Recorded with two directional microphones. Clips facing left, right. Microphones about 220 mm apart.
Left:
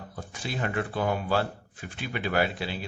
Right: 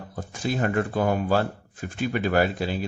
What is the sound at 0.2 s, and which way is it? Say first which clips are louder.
Speech: right 7 dB; 45° right (ahead or behind).